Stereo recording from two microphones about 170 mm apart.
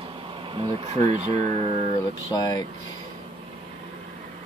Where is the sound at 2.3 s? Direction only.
25° left (ahead or behind).